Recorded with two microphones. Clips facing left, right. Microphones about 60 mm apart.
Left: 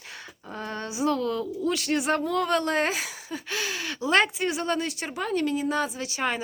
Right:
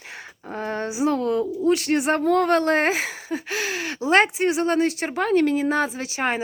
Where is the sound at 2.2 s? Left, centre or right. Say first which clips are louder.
Right 6 dB; right.